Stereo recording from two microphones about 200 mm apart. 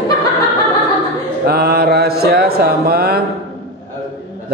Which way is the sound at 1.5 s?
50° right (ahead or behind).